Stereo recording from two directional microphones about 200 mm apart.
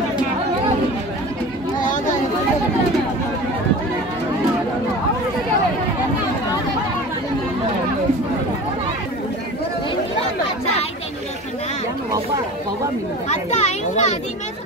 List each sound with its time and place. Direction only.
13.3 s children playing: 35° left (ahead or behind)